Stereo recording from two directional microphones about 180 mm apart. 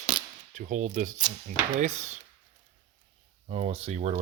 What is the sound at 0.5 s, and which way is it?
Speech, 45° right (ahead or behind).